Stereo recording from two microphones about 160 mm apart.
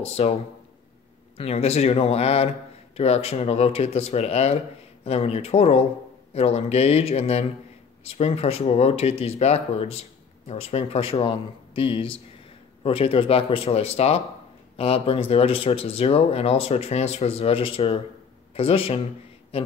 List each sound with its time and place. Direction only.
0.0 s speech: 40° left (ahead or behind)
1.4 s speech: 40° left (ahead or behind)